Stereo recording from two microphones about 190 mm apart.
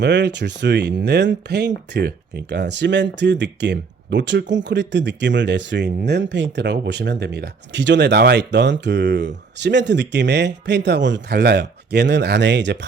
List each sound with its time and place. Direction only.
0.0 s speech: 65° right (ahead or behind)